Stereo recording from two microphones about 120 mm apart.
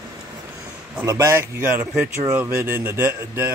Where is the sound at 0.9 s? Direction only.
25° right (ahead or behind).